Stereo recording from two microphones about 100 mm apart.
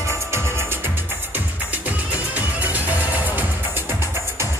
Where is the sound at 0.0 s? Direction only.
25° right (ahead or behind).